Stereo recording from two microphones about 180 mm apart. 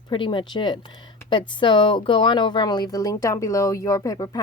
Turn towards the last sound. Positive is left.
turn(degrees=20)  # may be behind; listen again after turning